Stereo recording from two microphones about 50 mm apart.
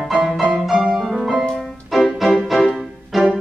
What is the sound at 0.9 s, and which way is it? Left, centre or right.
Music, centre.